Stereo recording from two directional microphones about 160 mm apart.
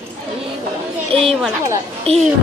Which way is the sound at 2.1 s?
40° right (ahead or behind).